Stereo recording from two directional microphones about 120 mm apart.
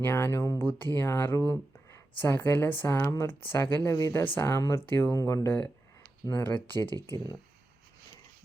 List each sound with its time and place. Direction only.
0.0 s speech: 20° left (ahead or behind)